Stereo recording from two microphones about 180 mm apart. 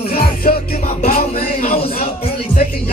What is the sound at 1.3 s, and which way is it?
Speech, 35° left (ahead or behind).